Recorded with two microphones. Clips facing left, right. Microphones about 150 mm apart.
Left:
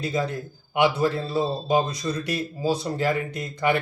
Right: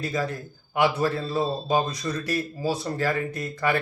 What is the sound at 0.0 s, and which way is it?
A man's voice, 20° left (ahead or behind).